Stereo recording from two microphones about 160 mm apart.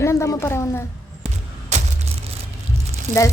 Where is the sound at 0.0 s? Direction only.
15° left (ahead or behind).